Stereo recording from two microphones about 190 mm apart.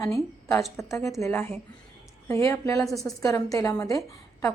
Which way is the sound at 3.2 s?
15° left (ahead or behind).